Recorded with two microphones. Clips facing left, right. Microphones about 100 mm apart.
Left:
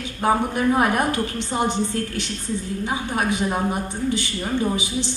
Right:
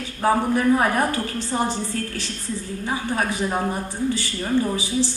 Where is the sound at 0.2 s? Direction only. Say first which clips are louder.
Right 1 dB; 20° left (ahead or behind).